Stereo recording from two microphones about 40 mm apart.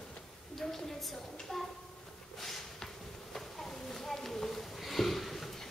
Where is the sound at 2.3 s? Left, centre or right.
Centre.